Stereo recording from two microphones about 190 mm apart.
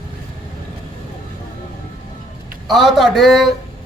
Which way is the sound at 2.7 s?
Centre (ahead or behind).